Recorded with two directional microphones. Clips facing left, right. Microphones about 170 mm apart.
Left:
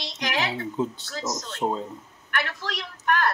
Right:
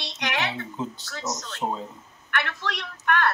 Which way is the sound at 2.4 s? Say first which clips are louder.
Even; 35° left (ahead or behind).